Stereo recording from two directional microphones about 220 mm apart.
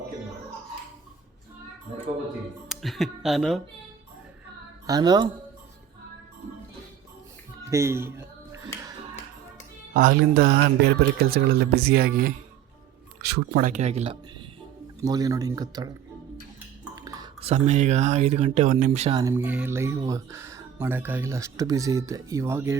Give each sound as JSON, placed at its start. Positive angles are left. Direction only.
{"t": 2.6, "sound": "speech", "side_deg": 0}
{"t": 4.9, "sound": "speech", "side_deg": -15}
{"t": 7.6, "sound": "a sound", "side_deg": -10}
{"t": 9.9, "sound": "speech", "side_deg": -40}
{"t": 15.0, "sound": "speech", "side_deg": -15}
{"t": 16.9, "sound": "a sound", "side_deg": -15}
{"t": 17.4, "sound": "speech", "side_deg": -30}
{"t": 19.2, "sound": "speech", "side_deg": -10}